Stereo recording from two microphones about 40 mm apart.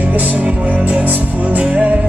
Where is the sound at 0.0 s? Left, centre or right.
Right.